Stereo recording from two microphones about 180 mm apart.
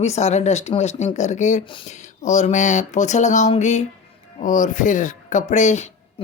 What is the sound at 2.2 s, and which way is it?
Speech, 40° left (ahead or behind).